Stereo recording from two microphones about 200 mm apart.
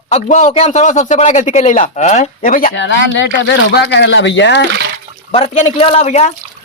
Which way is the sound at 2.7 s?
65° left (ahead or behind).